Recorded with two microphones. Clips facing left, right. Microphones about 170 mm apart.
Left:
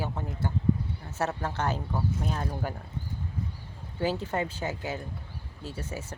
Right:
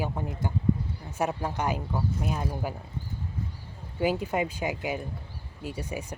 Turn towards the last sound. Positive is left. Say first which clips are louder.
# right 3 dB
turn(degrees=-15)  # may be behind; listen again after turning